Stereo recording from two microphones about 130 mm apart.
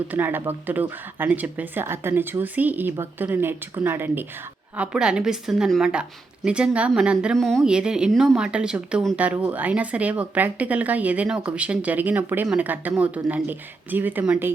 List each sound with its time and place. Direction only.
0.1 s speech: 15° right (ahead or behind)
4.8 s speech: 5° right (ahead or behind)
7.3 s speech: 5° left (ahead or behind); by 14.5 s 15° right (ahead or behind)